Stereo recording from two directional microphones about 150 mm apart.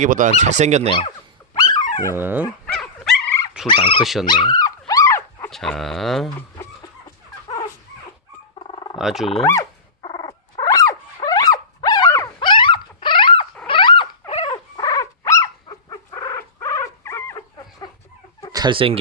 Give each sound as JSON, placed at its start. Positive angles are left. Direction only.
{"t": 0.0, "sound": "speech", "side_deg": -60}
{"t": 0.9, "sound": "speech", "side_deg": 35}
{"t": 1.5, "sound": "dog", "side_deg": 25}
{"t": 2.1, "sound": "speech", "side_deg": -10}
{"t": 2.7, "sound": "dog", "side_deg": 5}
{"t": 3.7, "sound": "speech", "side_deg": 35}
{"t": 4.0, "sound": "speech", "side_deg": 0}
{"t": 4.3, "sound": "dog", "side_deg": 30}
{"t": 5.5, "sound": "speech", "side_deg": 5}
{"t": 7.4, "sound": "dog", "side_deg": 25}
{"t": 8.5, "sound": "bird", "side_deg": 35}
{"t": 9.0, "sound": "speech", "side_deg": 0}
{"t": 10.0, "sound": "dog", "side_deg": 30}
{"t": 18.5, "sound": "speech", "side_deg": -30}